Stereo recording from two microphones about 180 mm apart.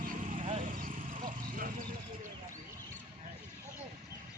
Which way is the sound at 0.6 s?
45° right (ahead or behind).